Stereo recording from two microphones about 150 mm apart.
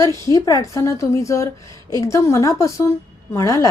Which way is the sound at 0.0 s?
20° left (ahead or behind).